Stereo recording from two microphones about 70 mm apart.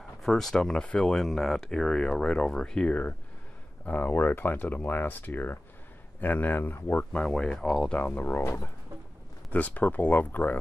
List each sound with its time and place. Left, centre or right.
0.2 s speech: centre; by 7.2 s left
7.2 s speech: centre
8.0 s speech: left
9.5 s speech: left